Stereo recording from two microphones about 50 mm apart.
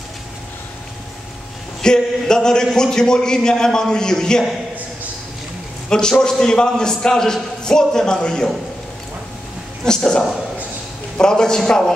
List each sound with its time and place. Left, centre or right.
1.8 s a man's voice: centre
5.9 s a man's voice: centre
9.8 s a man's voice: centre